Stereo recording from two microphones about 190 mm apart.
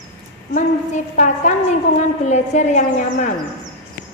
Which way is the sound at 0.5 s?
40° left (ahead or behind).